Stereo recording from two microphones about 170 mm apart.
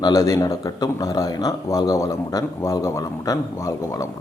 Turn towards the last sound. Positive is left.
turn(degrees=15)  # may be behind; listen again after turning